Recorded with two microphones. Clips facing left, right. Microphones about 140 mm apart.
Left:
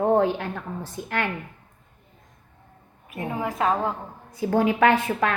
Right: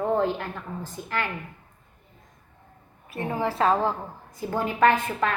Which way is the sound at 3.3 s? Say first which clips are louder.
Right 2 dB; 30° right (ahead or behind).